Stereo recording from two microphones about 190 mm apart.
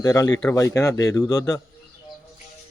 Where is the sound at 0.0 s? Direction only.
20° left (ahead or behind).